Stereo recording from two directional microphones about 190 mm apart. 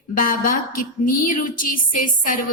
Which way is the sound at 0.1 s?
45° left (ahead or behind).